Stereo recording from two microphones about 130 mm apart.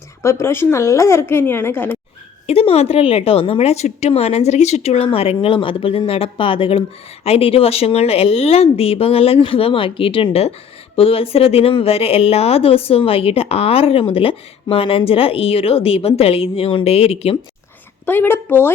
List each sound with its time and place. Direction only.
0.2 s speech: 20° left (ahead or behind)
2.5 s a woman's voice: 50° left (ahead or behind)
18.0 s a woman's voice: 15° left (ahead or behind)